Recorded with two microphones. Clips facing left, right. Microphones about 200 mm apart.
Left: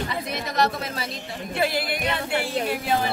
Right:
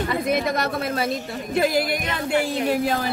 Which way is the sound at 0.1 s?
55° right (ahead or behind).